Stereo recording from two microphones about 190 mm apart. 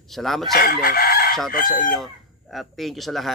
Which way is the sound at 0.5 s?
50° left (ahead or behind).